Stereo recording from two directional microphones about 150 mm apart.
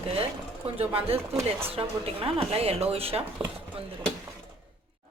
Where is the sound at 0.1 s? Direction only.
40° right (ahead or behind).